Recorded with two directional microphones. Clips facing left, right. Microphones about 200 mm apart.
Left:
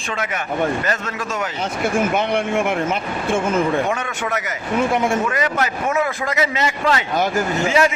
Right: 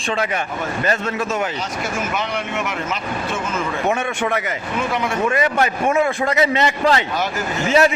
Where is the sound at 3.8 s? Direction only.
25° right (ahead or behind).